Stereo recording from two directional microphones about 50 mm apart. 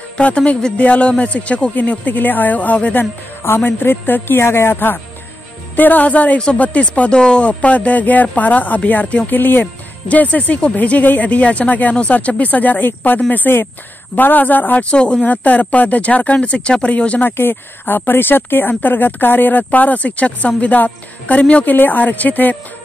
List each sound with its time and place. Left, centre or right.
0.2 s speech: left
4.4 s speech: left
9.3 s speech: left
10.0 s speech: left
14.9 s speech: left
15.2 s speech: left
17.3 s speech: left